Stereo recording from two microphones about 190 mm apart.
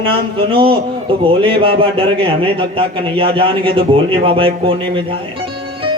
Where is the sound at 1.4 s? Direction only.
30° right (ahead or behind).